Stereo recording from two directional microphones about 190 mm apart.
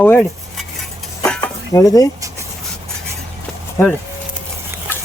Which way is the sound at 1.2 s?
5° left (ahead or behind).